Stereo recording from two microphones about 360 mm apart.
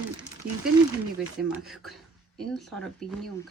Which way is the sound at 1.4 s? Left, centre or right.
Centre.